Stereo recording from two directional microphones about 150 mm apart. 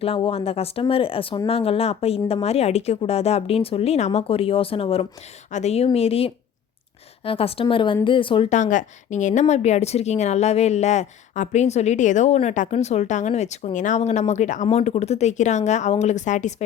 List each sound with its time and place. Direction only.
0.0 s speech: 40° left (ahead or behind)
5.5 s a woman's voice: 50° left (ahead or behind); by 8.4 s 35° left (ahead or behind)
8.4 s a woman's voice: 55° left (ahead or behind)